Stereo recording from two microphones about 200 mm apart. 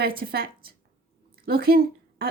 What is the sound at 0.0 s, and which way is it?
Speech, 50° right (ahead or behind).